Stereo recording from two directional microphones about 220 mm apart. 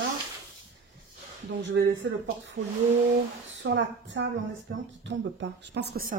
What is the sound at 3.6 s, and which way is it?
Speech, 55° right (ahead or behind).